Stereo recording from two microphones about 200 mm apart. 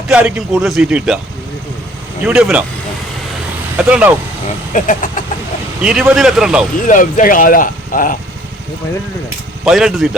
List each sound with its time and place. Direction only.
0.1 s speech: 5° right (ahead or behind)
2.2 s speech: 5° right (ahead or behind)
3.8 s speech: 5° right (ahead or behind)
4.7 s speech: 40° left (ahead or behind)
5.8 s speech: 5° right (ahead or behind)
6.8 s speech: 40° left (ahead or behind)
9.6 s speech: centre (ahead or behind)